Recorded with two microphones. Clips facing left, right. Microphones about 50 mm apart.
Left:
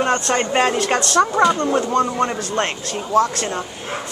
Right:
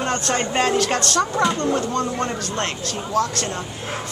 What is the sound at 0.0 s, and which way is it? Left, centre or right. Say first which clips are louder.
A woman's voice: left 4 dB; centre.